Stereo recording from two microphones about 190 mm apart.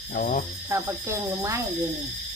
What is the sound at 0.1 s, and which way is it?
Speech, 45° left (ahead or behind).